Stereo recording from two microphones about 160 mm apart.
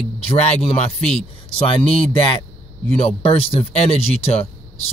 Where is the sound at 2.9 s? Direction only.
40° left (ahead or behind).